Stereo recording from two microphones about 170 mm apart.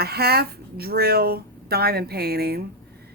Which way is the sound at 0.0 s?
70° right (ahead or behind).